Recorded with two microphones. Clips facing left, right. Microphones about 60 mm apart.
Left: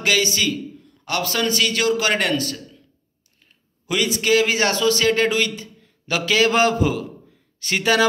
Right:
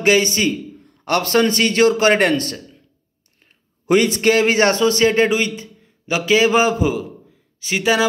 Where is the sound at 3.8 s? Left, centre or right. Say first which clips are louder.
Right 6 dB; right.